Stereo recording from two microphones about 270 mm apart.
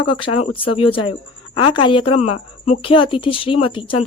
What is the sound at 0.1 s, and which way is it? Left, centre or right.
Speech, left.